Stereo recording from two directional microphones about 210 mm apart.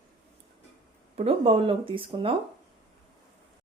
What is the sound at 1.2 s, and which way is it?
Speech, 25° right (ahead or behind).